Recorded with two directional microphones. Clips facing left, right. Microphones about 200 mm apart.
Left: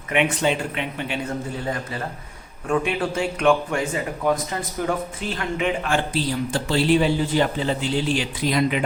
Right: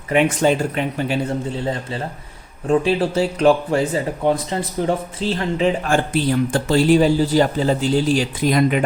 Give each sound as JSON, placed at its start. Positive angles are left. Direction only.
{"t": 0.1, "sound": "speech", "side_deg": -40}
{"t": 5.9, "sound": "speech", "side_deg": -50}